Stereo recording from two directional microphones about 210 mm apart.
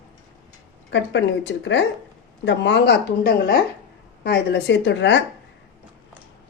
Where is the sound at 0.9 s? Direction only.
55° left (ahead or behind).